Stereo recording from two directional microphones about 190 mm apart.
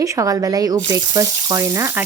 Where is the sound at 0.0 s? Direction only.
15° right (ahead or behind).